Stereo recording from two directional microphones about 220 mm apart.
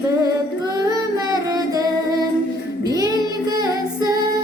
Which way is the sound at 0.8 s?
15° right (ahead or behind).